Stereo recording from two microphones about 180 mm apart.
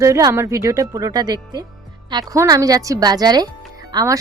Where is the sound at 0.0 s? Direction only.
15° right (ahead or behind).